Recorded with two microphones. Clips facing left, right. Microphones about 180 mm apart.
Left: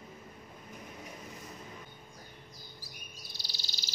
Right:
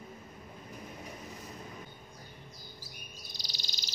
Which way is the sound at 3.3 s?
15° right (ahead or behind).